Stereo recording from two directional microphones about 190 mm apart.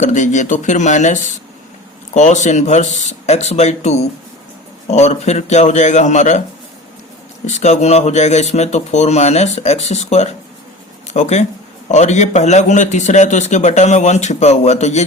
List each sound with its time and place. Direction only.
0.0 s a man's voice: 40° left (ahead or behind)
7.4 s a man's voice: 35° left (ahead or behind)